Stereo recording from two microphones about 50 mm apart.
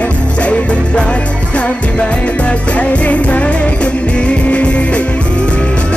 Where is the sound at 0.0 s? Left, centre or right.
Left.